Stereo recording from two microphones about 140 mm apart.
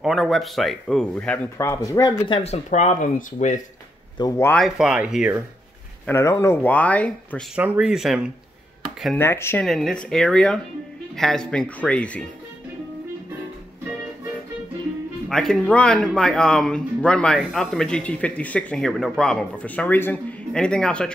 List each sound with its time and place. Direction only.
0.0 s speech: centre (ahead or behind); by 2.2 s 25° left (ahead or behind)
2.2 s speech: 35° left (ahead or behind)
2.5 s speech: 60° left (ahead or behind)
4.2 s speech: 30° left (ahead or behind)
4.6 s speech: centre (ahead or behind)
6.0 s speech: 20° left (ahead or behind)
7.5 s speech: 10° right (ahead or behind)
9.1 s speech: 15° left (ahead or behind)
9.7 s speech: centre (ahead or behind)
15.2 s speech: centre (ahead or behind)